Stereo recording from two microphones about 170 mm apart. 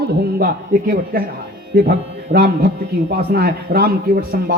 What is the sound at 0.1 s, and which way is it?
A man's voice, 70° right (ahead or behind).